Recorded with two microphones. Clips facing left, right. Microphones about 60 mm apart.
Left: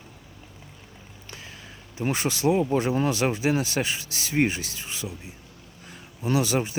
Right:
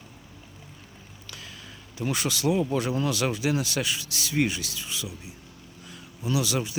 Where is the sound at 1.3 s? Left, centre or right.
Left.